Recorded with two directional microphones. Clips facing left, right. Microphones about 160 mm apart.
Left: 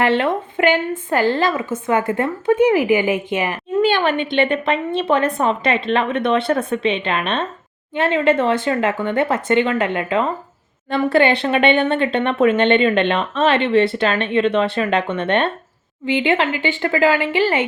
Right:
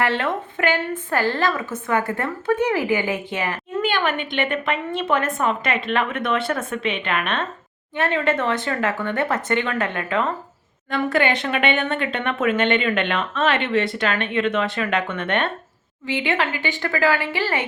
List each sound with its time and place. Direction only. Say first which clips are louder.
0.0 s speech: left 5 dB; 20° left (ahead or behind)